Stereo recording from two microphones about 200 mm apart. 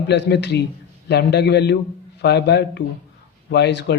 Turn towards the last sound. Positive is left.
turn(degrees=60)  # may be behind; listen again after turning